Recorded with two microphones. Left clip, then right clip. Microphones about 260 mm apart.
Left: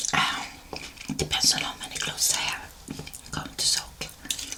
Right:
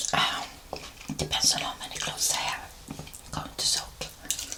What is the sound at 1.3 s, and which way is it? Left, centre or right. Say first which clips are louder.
Whispering: left 2 dB; centre.